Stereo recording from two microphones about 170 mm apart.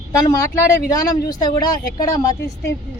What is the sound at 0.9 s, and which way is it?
Speech, 25° left (ahead or behind).